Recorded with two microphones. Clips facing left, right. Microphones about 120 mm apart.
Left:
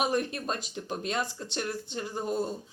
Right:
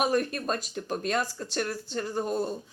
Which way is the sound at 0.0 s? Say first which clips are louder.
Right 2 dB; 20° left (ahead or behind).